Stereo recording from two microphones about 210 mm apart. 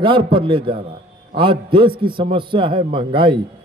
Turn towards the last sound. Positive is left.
turn(degrees=-25)  # may be behind; listen again after turning